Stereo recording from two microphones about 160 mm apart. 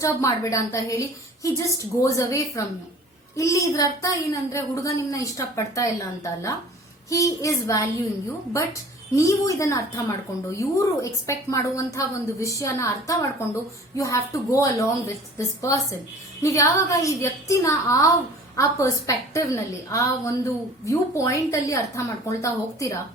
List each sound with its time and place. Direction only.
0.0 s a woman's voice: 20° left (ahead or behind)
9.1 s a woman's voice: 20° left (ahead or behind)